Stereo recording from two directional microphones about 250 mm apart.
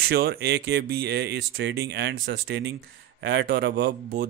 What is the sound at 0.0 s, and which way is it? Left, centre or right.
Speech, right.